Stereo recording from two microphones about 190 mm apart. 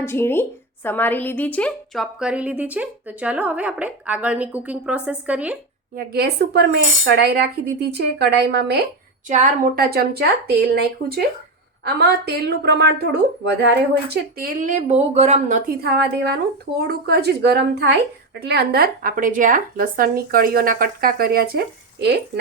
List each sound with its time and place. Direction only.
0.0 s a woman's voice: 15° left (ahead or behind); by 5.5 s 5° right (ahead or behind)
6.1 s speech: 60° right (ahead or behind)
9.3 s a woman's voice: 40° right (ahead or behind)
9.9 s speech: 55° right (ahead or behind)
14.1 s speech: 50° right (ahead or behind)